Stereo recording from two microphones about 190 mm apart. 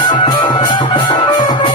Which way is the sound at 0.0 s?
25° left (ahead or behind).